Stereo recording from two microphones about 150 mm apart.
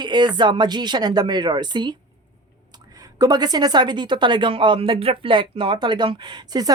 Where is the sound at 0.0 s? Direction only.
30° right (ahead or behind).